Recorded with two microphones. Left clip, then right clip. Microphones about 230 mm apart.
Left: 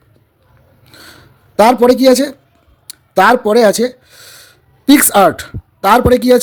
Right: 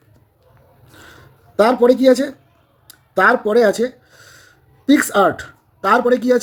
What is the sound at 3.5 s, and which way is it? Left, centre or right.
A man's voice, left.